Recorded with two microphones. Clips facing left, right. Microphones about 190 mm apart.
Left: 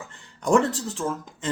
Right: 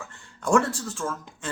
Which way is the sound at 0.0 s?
20° left (ahead or behind).